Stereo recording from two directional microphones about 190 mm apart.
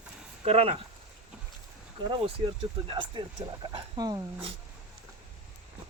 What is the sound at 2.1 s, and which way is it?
Speech, 25° right (ahead or behind).